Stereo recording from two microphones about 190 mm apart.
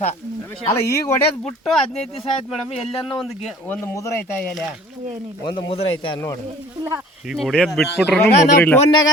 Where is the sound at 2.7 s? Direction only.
30° left (ahead or behind).